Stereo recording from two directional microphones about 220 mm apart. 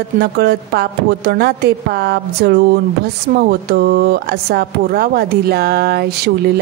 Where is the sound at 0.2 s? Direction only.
50° right (ahead or behind).